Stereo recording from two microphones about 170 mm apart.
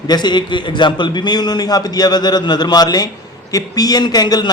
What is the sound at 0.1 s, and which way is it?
Speech, 25° left (ahead or behind).